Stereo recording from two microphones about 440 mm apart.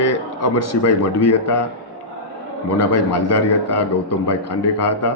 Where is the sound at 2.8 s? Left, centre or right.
Left.